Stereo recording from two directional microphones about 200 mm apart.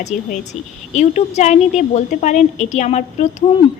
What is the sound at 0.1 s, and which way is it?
Speech, centre (ahead or behind).